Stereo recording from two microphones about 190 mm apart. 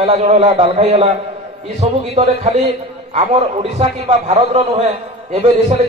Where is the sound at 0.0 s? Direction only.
30° right (ahead or behind).